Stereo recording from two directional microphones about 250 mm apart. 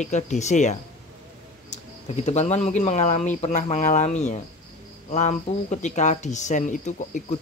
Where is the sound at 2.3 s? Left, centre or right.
Left.